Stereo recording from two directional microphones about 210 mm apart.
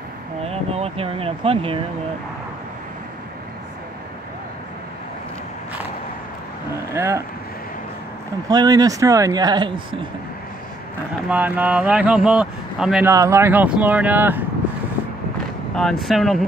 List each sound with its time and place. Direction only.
0.4 s speech: 30° right (ahead or behind)
6.7 s speech: 15° right (ahead or behind)
8.5 s speech: 20° right (ahead or behind)
11.2 s speech: 5° right (ahead or behind)
13.1 s speech: 15° right (ahead or behind)
15.7 s speech: centre (ahead or behind)